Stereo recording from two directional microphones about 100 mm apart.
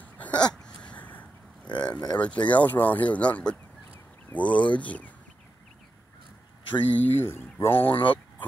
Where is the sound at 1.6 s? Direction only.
45° left (ahead or behind).